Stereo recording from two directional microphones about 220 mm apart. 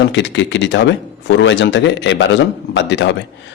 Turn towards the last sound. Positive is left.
turn(degrees=55)  # may be behind; listen again after turning